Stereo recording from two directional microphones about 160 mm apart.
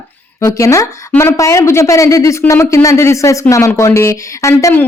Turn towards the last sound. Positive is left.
turn(degrees=15)  # may be behind; listen again after turning